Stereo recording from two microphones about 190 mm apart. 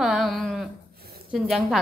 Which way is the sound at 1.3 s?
Centre (ahead or behind).